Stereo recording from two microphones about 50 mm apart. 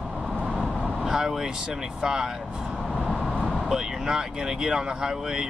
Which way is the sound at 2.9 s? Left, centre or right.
Centre.